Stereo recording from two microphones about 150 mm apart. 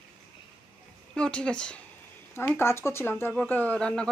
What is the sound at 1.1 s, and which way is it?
Speech, 5° left (ahead or behind).